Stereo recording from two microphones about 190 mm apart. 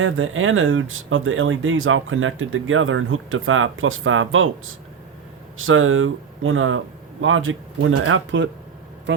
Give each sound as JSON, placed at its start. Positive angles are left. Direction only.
{"t": 0.0, "sound": "speech", "side_deg": -90}
{"t": 9.1, "sound": "speech", "side_deg": -70}